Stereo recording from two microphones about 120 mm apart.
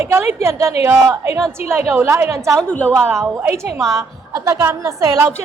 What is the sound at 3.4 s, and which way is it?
A woman's voice, 20° right (ahead or behind).